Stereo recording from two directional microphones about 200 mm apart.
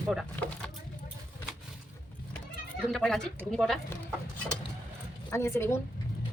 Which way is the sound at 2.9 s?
5° left (ahead or behind).